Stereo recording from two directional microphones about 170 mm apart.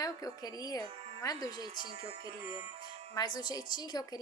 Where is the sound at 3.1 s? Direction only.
25° left (ahead or behind).